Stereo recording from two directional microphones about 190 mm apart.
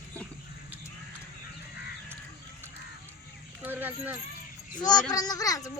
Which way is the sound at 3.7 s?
10° right (ahead or behind).